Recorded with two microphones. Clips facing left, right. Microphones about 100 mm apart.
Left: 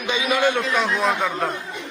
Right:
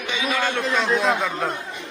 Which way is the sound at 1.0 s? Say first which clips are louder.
Even; centre (ahead or behind).